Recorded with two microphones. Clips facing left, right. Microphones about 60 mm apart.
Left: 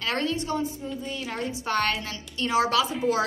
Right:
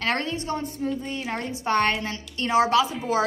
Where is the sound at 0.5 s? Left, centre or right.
Right.